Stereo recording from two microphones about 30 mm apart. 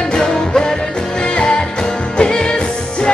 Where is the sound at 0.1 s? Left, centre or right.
Left.